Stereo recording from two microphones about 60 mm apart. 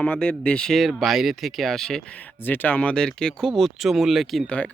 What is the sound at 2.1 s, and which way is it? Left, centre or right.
Speech, left.